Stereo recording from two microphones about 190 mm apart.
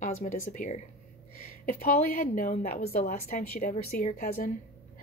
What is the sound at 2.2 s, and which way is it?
Speech, 40° left (ahead or behind).